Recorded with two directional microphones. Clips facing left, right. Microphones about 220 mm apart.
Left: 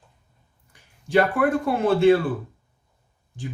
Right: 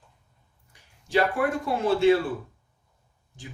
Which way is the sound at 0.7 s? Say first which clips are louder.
Left 4 dB; 55° left (ahead or behind).